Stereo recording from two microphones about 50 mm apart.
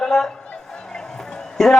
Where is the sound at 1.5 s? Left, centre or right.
Centre.